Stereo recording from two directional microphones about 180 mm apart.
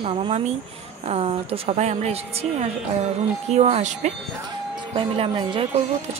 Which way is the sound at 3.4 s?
35° right (ahead or behind).